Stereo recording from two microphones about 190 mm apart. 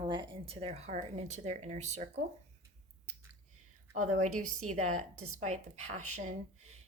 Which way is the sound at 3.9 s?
40° right (ahead or behind).